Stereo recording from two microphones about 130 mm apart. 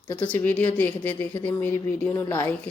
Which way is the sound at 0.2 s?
15° left (ahead or behind).